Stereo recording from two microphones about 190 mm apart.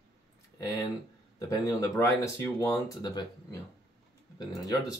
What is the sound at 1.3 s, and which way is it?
Speech, 20° left (ahead or behind).